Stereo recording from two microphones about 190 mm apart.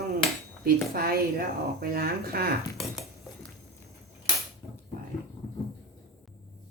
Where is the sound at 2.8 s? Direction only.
Centre (ahead or behind).